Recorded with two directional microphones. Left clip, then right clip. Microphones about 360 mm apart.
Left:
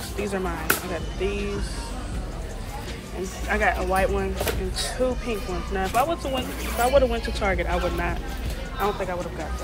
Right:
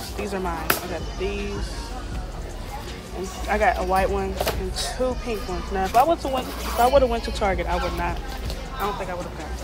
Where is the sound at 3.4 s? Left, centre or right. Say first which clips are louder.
Right 2 dB; centre.